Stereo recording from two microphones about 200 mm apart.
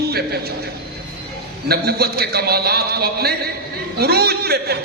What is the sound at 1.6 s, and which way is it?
Speech, 50° right (ahead or behind).